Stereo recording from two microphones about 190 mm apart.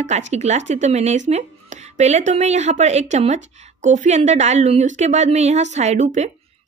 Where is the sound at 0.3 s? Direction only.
35° right (ahead or behind).